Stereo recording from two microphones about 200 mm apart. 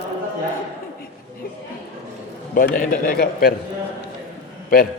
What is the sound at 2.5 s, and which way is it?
A man's voice, 45° left (ahead or behind).